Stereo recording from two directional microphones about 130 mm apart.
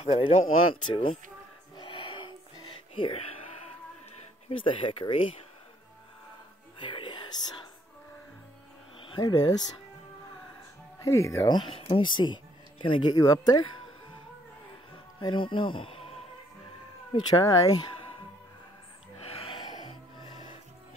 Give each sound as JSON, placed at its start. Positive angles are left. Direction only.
{"t": 0.0, "sound": "speech", "side_deg": 50}
{"t": 1.8, "sound": "music", "side_deg": 40}
{"t": 2.9, "sound": "a sound", "side_deg": 45}
{"t": 4.5, "sound": "speech", "side_deg": 40}
{"t": 6.8, "sound": "whispering", "side_deg": 35}
{"t": 9.0, "sound": "speech", "side_deg": 35}
{"t": 11.0, "sound": "speech", "side_deg": 25}
{"t": 11.5, "sound": "speech", "side_deg": 40}
{"t": 15.1, "sound": "speech", "side_deg": 35}
{"t": 17.1, "sound": "speech", "side_deg": 30}
{"t": 19.1, "sound": "music", "side_deg": 45}